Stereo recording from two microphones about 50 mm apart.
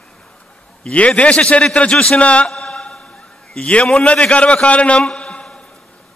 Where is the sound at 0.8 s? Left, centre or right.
Left.